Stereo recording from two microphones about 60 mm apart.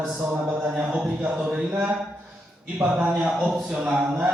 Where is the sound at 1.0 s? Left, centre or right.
Centre.